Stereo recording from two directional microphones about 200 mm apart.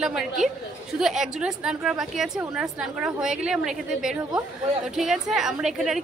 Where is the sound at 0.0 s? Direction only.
Centre (ahead or behind).